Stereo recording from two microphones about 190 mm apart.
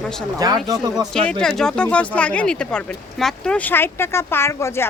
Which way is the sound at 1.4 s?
5° left (ahead or behind).